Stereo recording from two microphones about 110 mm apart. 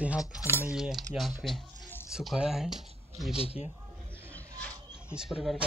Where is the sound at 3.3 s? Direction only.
60° left (ahead or behind).